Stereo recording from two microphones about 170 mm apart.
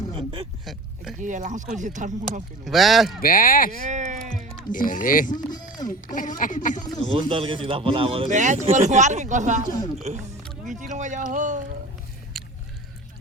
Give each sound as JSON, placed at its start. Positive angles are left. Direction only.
{"t": 0.2, "sound": "speech", "side_deg": -35}
{"t": 0.6, "sound": "speech", "side_deg": 0}
{"t": 1.2, "sound": "speech", "side_deg": -45}
{"t": 2.6, "sound": "speech", "side_deg": 0}
{"t": 3.2, "sound": "speech", "side_deg": 55}
{"t": 3.8, "sound": "a sound", "side_deg": -45}
{"t": 4.7, "sound": "speech", "side_deg": 50}
{"t": 7.1, "sound": "speech", "side_deg": -30}
{"t": 8.3, "sound": "speech", "side_deg": -45}
{"t": 12.4, "sound": "biting", "side_deg": 0}